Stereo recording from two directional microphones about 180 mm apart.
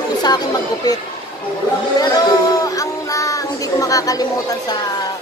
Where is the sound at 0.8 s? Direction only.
20° left (ahead or behind).